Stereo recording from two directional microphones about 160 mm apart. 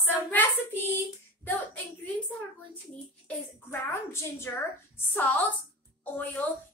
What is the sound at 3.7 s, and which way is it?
A woman's voice, 15° left (ahead or behind).